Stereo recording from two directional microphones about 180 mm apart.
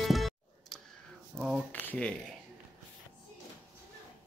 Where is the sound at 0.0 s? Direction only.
Centre (ahead or behind).